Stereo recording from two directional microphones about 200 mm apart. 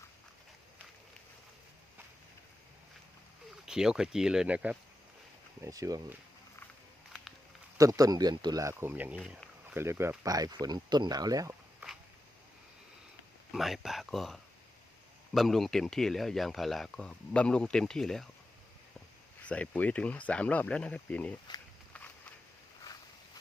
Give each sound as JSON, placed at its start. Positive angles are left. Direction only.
{"t": 3.7, "sound": "speech", "side_deg": -5}
{"t": 5.6, "sound": "speech", "side_deg": -15}
{"t": 7.8, "sound": "speech", "side_deg": -15}
{"t": 13.5, "sound": "speech", "side_deg": 0}
{"t": 19.5, "sound": "speech", "side_deg": 5}